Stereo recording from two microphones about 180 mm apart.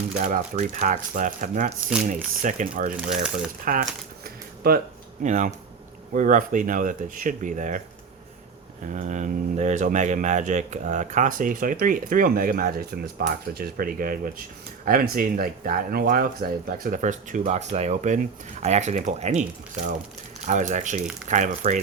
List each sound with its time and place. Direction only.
0.2 s speech: 45° right (ahead or behind)
3.0 s speech: 5° right (ahead or behind)
3.6 s speech: 50° right (ahead or behind)
4.2 s camera: 55° right (ahead or behind)
5.2 s speech: 40° right (ahead or behind)
8.9 s speech: 40° right (ahead or behind)
20.5 s speech: 45° right (ahead or behind)